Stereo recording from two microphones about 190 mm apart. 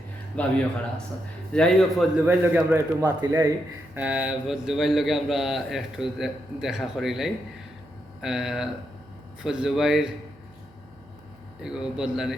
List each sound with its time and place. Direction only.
0.3 s speech: 5° left (ahead or behind)
1.5 s a man's voice: centre (ahead or behind)
2.2 s a man's voice: 10° right (ahead or behind)
11.6 s a man's voice: 5° right (ahead or behind)